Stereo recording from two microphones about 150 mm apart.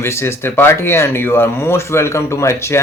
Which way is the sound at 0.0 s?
15° left (ahead or behind).